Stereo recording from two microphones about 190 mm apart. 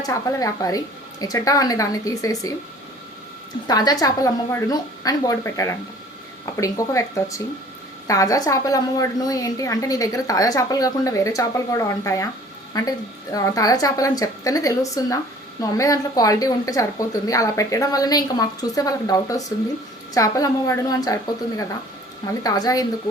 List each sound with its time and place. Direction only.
0.0 s a woman's voice: 15° left (ahead or behind)
3.7 s a woman's voice: 20° left (ahead or behind)